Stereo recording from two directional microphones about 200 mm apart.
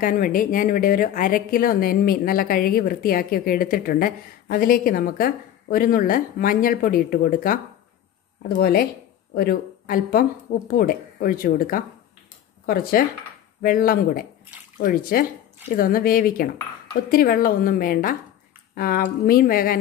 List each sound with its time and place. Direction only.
0.0 s speech: 45° left (ahead or behind)